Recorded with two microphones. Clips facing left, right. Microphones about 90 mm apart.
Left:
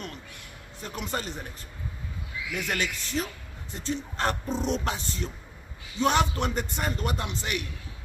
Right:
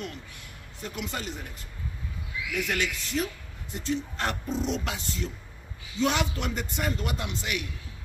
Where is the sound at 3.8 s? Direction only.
40° left (ahead or behind).